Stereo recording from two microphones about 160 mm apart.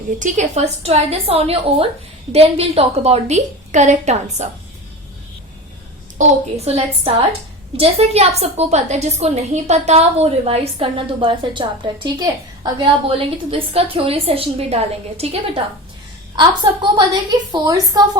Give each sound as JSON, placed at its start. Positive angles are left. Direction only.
{"t": 0.2, "sound": "a woman's voice", "side_deg": -45}
{"t": 6.1, "sound": "a woman's voice", "side_deg": -40}